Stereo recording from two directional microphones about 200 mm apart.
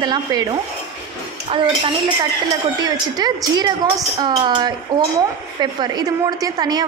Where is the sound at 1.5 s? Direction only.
25° right (ahead or behind).